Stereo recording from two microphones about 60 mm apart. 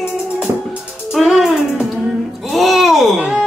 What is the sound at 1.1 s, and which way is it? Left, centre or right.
Music, centre.